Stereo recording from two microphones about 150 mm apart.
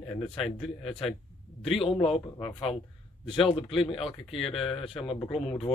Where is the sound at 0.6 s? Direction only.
35° left (ahead or behind).